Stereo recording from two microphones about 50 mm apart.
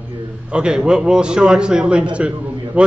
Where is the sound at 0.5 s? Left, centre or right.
Centre.